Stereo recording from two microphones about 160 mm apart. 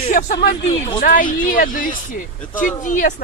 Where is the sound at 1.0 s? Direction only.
60° left (ahead or behind).